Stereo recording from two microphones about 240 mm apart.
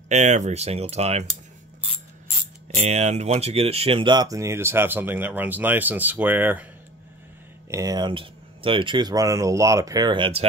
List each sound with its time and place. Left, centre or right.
0.1 s speech: right
2.7 s speech: right; by 6.7 s centre
7.7 s speech: centre